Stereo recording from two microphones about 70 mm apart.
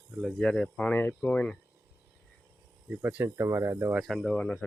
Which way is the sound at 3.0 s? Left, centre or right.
Right.